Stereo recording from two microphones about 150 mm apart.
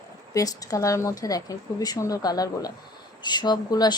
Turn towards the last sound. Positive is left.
turn(degrees=25)  # may be behind; listen again after turning